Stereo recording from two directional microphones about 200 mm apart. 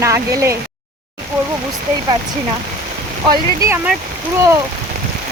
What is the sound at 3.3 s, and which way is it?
Speech, 15° right (ahead or behind).